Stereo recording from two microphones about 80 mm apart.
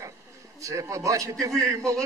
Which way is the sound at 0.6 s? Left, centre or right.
Right.